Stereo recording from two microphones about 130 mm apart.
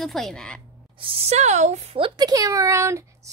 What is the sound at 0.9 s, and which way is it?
A child's voice, 45° right (ahead or behind).